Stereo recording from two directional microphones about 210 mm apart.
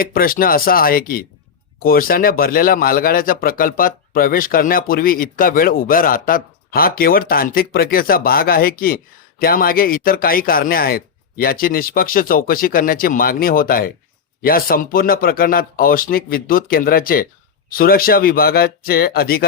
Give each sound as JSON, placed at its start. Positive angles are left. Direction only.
{"t": 0.0, "sound": "speech", "side_deg": 45}